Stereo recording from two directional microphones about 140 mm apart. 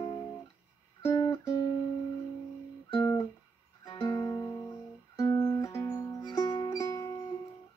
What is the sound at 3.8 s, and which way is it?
Music, 25° left (ahead or behind).